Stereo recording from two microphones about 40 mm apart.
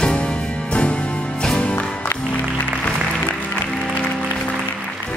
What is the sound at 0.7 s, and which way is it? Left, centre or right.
Music, left.